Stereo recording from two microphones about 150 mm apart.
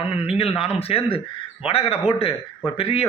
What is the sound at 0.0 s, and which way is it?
A man's voice, 40° left (ahead or behind).